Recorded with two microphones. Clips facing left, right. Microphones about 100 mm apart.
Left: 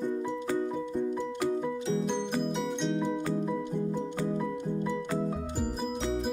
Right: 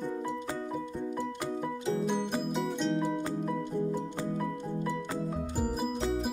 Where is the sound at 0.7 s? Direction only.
5° right (ahead or behind).